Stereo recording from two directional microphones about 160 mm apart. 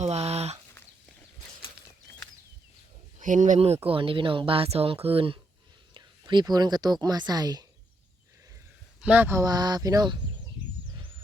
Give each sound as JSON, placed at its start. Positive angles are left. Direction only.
{"t": 0.0, "sound": "a sound", "side_deg": -40}
{"t": 3.2, "sound": "speech", "side_deg": -50}
{"t": 3.8, "sound": "speech", "side_deg": -35}
{"t": 9.0, "sound": "speech", "side_deg": -10}